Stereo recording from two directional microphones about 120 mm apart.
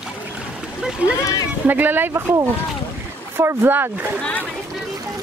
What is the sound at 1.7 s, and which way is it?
Speech, 15° right (ahead or behind).